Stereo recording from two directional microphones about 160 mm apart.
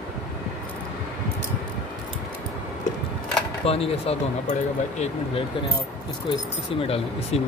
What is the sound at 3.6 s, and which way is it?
Speech, 40° left (ahead or behind).